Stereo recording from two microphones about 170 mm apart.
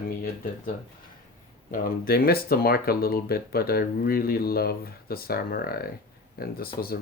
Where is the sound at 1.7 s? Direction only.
55° left (ahead or behind).